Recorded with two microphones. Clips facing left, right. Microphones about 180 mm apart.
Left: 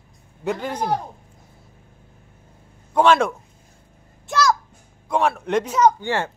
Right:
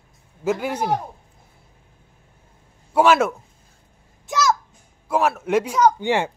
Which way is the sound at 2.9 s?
5° right (ahead or behind).